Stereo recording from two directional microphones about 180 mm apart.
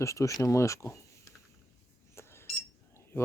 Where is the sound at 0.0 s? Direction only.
15° left (ahead or behind).